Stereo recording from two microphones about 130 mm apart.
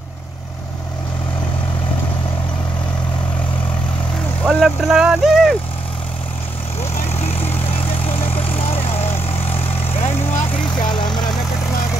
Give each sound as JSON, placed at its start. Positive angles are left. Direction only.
{"t": 4.5, "sound": "speech", "side_deg": -5}
{"t": 7.1, "sound": "vehicle", "side_deg": 55}
{"t": 10.7, "sound": "vehicle", "side_deg": 35}